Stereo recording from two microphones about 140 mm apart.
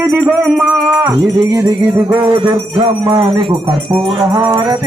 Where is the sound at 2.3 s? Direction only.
35° right (ahead or behind).